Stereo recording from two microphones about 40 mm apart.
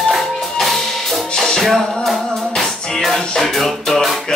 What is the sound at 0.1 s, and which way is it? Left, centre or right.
Music, centre.